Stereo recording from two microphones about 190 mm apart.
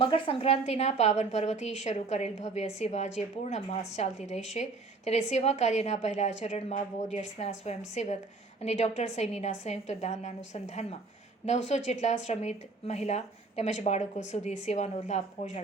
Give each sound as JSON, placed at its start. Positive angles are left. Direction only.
{"t": 0.0, "sound": "a woman's voice", "side_deg": 30}